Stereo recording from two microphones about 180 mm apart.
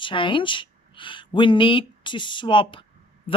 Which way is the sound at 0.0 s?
30° left (ahead or behind).